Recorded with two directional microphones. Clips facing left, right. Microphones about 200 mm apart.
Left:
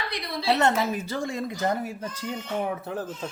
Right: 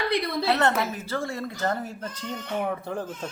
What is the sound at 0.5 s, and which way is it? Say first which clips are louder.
Speech: left 3 dB; 15° left (ahead or behind).